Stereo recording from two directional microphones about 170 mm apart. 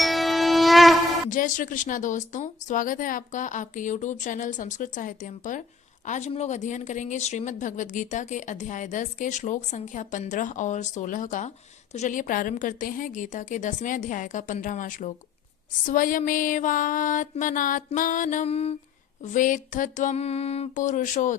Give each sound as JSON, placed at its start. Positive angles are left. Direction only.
{"t": 0.0, "sound": "mosquito", "side_deg": 0}
{"t": 1.3, "sound": "a woman's voice", "side_deg": 50}
{"t": 19.2, "sound": "a woman's voice", "side_deg": 50}